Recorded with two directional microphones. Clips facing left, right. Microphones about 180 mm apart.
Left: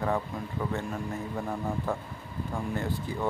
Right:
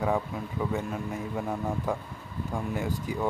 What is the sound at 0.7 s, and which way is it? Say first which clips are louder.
Speech: right 1 dB; 10° right (ahead or behind).